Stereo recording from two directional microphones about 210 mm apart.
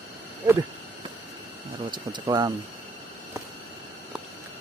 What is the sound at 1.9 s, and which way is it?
Speech, 20° right (ahead or behind).